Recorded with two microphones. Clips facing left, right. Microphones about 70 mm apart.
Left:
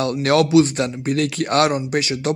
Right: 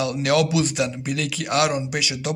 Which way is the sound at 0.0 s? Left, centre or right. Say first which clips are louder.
Left 3 dB; left.